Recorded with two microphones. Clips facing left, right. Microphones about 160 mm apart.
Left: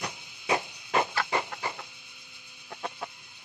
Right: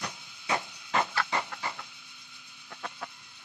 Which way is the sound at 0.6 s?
20° left (ahead or behind).